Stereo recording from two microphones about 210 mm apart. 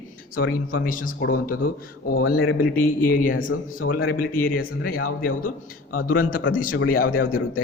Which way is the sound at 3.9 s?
45° left (ahead or behind).